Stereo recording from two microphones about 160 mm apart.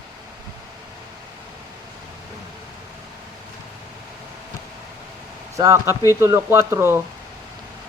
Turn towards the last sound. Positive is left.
turn(degrees=-15)  # may be behind; listen again after turning